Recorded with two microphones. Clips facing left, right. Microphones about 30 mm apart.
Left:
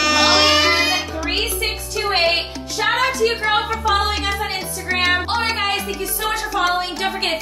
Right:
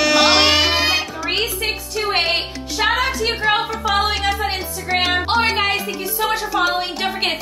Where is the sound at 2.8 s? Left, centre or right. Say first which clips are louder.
Right 1 dB; right.